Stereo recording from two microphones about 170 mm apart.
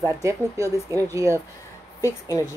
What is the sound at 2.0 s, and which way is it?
Speech, 15° left (ahead or behind).